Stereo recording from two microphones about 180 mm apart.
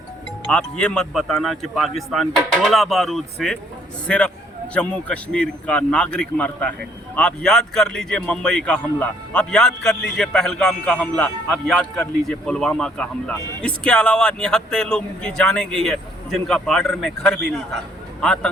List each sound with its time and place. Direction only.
0.5 s a man's voice: 5° left (ahead or behind)